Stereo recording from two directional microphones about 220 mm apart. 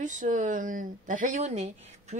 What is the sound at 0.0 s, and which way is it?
Speech, 35° right (ahead or behind).